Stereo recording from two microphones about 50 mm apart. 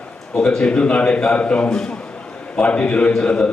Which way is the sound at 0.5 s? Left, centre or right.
Centre.